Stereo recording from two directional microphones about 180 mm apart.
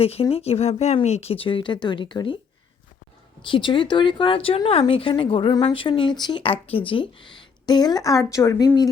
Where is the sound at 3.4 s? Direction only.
25° left (ahead or behind).